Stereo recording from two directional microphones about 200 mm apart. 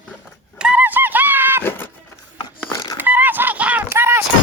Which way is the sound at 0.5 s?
5° right (ahead or behind).